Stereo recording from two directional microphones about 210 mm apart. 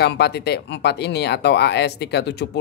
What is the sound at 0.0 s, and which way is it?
Speech, 55° left (ahead or behind).